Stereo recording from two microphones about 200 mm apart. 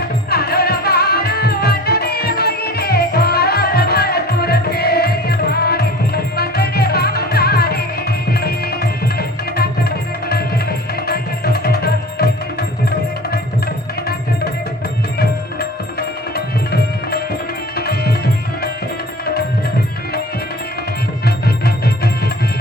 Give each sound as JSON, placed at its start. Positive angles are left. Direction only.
{"t": 0.3, "sound": "music", "side_deg": 50}
{"t": 8.3, "sound": "tabla", "side_deg": 50}
{"t": 11.0, "sound": "music", "side_deg": 50}
{"t": 16.7, "sound": "music", "side_deg": 50}
{"t": 17.7, "sound": "tabla", "side_deg": 50}
{"t": 21.2, "sound": "music", "side_deg": 50}